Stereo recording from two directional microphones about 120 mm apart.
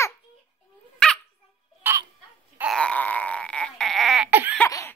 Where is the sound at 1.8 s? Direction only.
20° right (ahead or behind).